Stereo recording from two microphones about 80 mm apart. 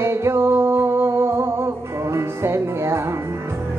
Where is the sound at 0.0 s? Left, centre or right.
Right.